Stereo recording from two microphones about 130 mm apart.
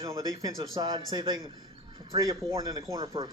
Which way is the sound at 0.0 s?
25° right (ahead or behind).